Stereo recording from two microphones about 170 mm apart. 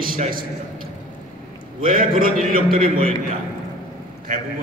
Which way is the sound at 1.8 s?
55° right (ahead or behind).